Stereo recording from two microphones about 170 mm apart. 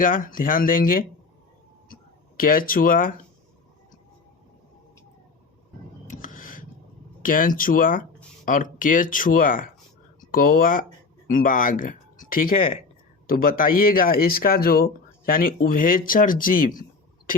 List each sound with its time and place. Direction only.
0.0 s speech: 55° left (ahead or behind)
2.4 s speech: 55° left (ahead or behind)
6.1 s a sound: 50° left (ahead or behind)
7.2 s speech: 55° left (ahead or behind)